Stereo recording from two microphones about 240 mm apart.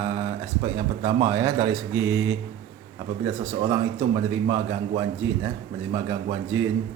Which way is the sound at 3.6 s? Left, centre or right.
Centre.